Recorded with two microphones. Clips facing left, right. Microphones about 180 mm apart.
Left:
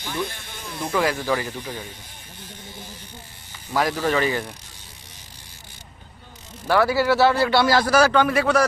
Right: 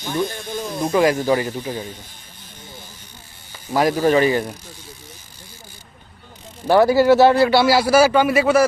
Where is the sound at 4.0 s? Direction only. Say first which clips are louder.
Right 8 dB; 20° right (ahead or behind).